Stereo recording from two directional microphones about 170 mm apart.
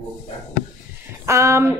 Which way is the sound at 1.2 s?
15° right (ahead or behind).